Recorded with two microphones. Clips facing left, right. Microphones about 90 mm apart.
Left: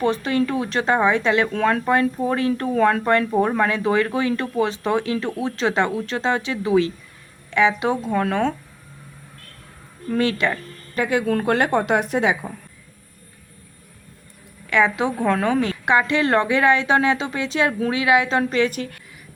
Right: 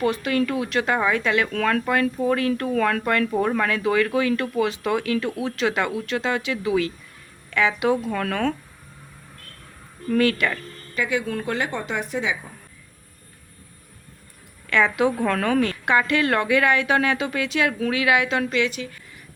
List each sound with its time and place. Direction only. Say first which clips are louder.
0.0 s a woman's voice: left 2 dB; 30° left (ahead or behind)
10.1 s a woman's voice: even; 25° left (ahead or behind)
10.9 s a woman's voice: left 4 dB; 45° left (ahead or behind)
14.7 s a woman's voice: left 1 dB; 15° left (ahead or behind); by 19.0 s 55° left (ahead or behind)